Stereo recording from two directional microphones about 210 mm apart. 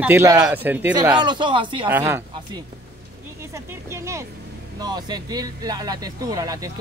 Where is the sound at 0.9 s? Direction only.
20° right (ahead or behind).